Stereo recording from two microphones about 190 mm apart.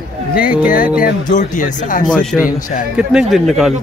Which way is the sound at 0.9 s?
45° left (ahead or behind).